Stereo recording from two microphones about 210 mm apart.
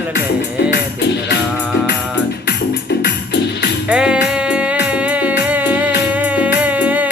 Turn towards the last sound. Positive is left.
turn(degrees=-5)  # may be behind; listen again after turning